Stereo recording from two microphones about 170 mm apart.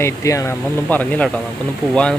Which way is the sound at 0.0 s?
20° left (ahead or behind).